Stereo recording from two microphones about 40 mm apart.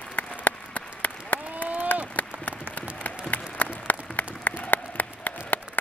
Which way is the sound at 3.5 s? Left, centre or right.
Left.